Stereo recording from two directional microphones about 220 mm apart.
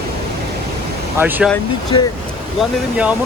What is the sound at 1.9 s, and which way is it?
Speech, 20° left (ahead or behind).